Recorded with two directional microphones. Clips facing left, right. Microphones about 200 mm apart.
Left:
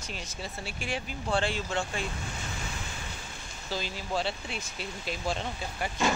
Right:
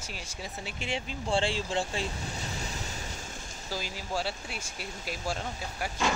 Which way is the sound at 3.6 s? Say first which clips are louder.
Left 2 dB; 10° right (ahead or behind).